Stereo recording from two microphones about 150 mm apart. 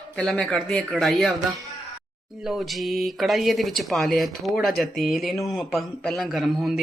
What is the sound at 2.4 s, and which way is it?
Speech, centre (ahead or behind).